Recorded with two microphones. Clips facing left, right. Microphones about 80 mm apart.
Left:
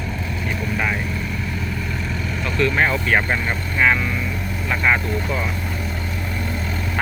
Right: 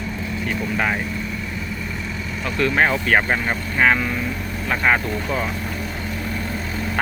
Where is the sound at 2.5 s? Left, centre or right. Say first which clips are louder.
Right 1 dB; right.